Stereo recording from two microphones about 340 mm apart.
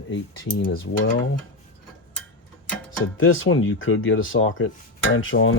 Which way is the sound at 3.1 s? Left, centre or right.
Left.